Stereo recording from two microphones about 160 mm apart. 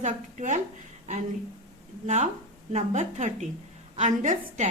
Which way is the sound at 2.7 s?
45° right (ahead or behind).